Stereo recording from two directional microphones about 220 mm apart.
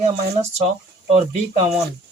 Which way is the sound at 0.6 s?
30° right (ahead or behind).